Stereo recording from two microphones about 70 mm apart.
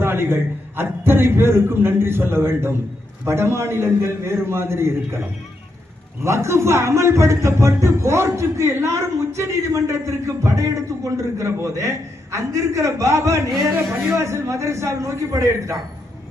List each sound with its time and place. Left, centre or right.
0.0 s a sound: right
0.8 s a man's voice: right
6.2 s a man's voice: right